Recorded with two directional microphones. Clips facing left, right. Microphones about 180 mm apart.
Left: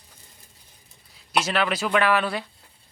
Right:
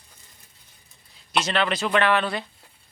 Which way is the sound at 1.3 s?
5° left (ahead or behind).